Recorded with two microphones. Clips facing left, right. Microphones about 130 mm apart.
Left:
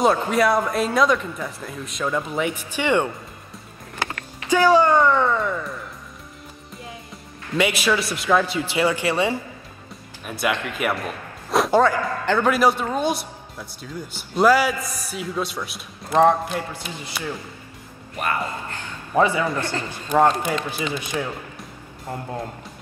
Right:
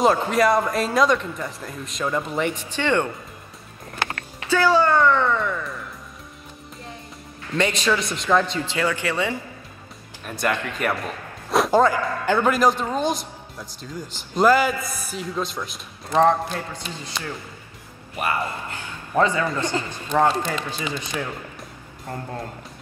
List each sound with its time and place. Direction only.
0.0 s a man's voice: centre (ahead or behind)
4.5 s a sound: 15° left (ahead or behind)
7.5 s a man's voice: 10° left (ahead or behind); by 12.4 s 10° right (ahead or behind)
12.4 s a man's voice: 5° left (ahead or behind)
18.2 s speech: 10° right (ahead or behind)
19.1 s a man's voice: 15° left (ahead or behind)
19.7 s speech: 15° right (ahead or behind)
20.1 s a man's voice: 10° left (ahead or behind)